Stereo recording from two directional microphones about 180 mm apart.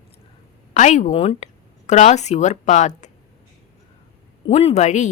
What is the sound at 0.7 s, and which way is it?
Speech, 40° left (ahead or behind).